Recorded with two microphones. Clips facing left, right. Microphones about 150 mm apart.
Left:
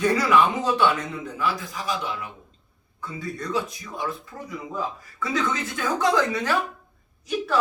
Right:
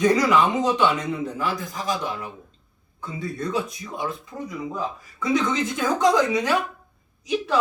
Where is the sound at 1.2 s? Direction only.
45° right (ahead or behind).